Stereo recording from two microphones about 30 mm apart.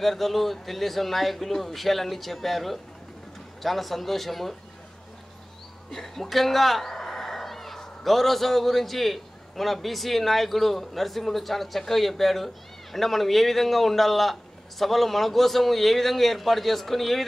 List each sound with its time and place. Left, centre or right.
0.0 s a man's voice: centre
5.9 s a man's voice: centre